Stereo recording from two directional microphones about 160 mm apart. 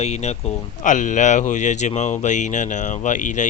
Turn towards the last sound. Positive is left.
turn(degrees=50)  # may be behind; listen again after turning